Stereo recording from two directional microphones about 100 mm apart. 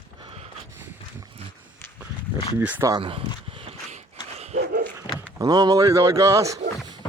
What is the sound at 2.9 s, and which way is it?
Speech, 60° right (ahead or behind).